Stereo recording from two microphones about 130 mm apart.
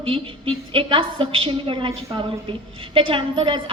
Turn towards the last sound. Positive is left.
turn(degrees=-40)  # may be behind; listen again after turning